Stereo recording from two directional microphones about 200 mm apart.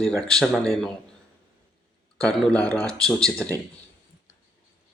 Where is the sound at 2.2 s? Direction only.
5° left (ahead or behind).